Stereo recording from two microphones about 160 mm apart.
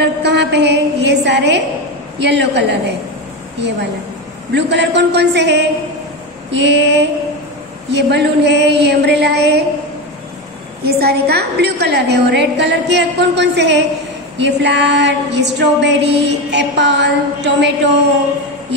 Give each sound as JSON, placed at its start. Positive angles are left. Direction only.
{"t": 0.0, "sound": "a sound", "side_deg": -90}
{"t": 2.1, "sound": "female singing", "side_deg": -90}
{"t": 4.6, "sound": "female singing", "side_deg": -90}
{"t": 10.8, "sound": "female singing", "side_deg": -80}